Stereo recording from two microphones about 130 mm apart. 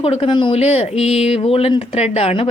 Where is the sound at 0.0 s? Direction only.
45° left (ahead or behind).